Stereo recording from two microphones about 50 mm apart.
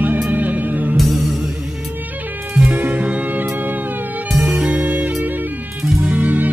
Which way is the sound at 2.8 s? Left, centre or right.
Right.